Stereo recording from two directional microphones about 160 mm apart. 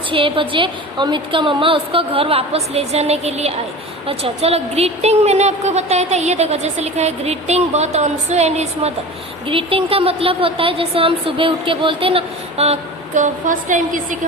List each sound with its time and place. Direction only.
0.1 s a woman's voice: 30° right (ahead or behind); by 14.2 s 55° right (ahead or behind)